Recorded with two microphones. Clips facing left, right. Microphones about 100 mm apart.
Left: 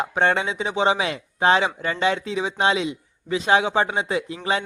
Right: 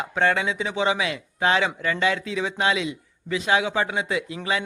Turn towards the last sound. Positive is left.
turn(degrees=30)  # may be behind; listen again after turning